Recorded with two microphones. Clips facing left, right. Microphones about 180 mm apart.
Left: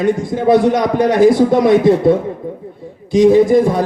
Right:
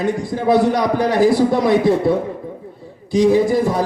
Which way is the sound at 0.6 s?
20° left (ahead or behind).